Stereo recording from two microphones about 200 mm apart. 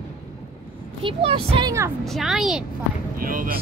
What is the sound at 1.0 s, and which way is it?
Speech, 25° right (ahead or behind).